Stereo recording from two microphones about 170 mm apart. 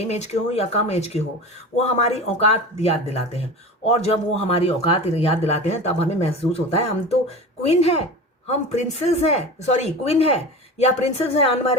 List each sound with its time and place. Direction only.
0.0 s speech: 40° left (ahead or behind)